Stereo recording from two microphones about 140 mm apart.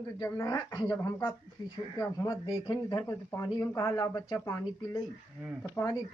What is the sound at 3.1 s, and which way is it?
Speech, 25° left (ahead or behind).